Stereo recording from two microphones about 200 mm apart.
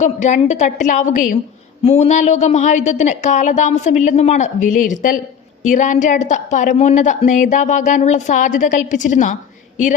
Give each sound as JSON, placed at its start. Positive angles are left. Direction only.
{"t": 0.0, "sound": "a woman's voice", "side_deg": 35}